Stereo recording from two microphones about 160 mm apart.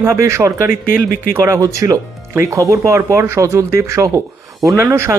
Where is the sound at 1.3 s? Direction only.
15° right (ahead or behind).